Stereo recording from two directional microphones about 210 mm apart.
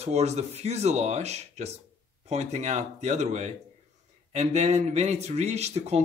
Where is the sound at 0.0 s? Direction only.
30° right (ahead or behind).